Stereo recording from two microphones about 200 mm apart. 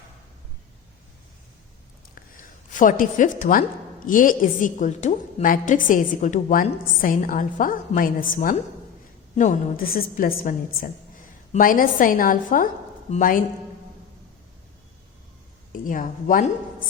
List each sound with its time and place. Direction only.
2.7 s a woman's voice: 40° left (ahead or behind)
15.8 s a woman's voice: 40° left (ahead or behind)